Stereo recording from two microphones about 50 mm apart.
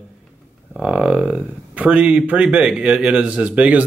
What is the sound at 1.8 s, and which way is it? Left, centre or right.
Speech, right.